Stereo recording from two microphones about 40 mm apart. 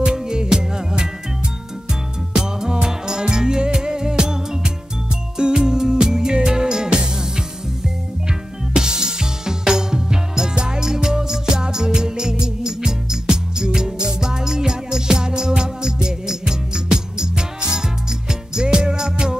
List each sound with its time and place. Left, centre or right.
0.0 s music: right
2.3 s music: centre